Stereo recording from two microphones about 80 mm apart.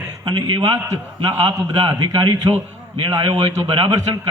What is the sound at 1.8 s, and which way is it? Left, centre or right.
A man's voice, right.